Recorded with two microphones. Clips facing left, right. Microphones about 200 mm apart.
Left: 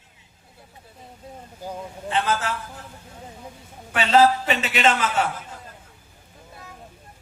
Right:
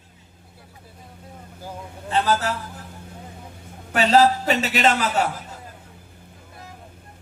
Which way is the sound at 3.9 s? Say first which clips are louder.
Right 1 dB; 40° right (ahead or behind).